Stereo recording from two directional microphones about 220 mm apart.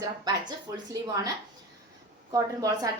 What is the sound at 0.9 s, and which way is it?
Speech, 15° right (ahead or behind).